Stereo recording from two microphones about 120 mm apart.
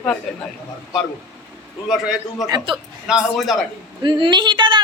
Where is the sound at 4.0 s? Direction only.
40° right (ahead or behind).